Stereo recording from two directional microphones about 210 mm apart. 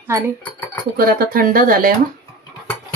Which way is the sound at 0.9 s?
45° right (ahead or behind).